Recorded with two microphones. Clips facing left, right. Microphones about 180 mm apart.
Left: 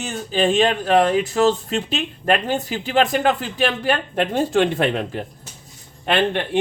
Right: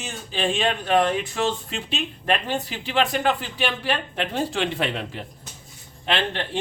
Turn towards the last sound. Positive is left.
turn(degrees=55)  # may be behind; listen again after turning